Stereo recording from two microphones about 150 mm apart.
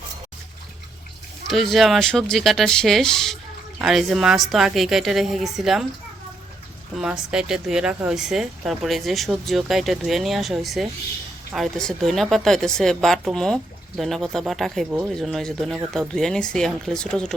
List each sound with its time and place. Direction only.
1.5 s speech: centre (ahead or behind)
6.9 s speech: 5° right (ahead or behind)
14.8 s speech: 15° right (ahead or behind)
15.1 s speech: centre (ahead or behind)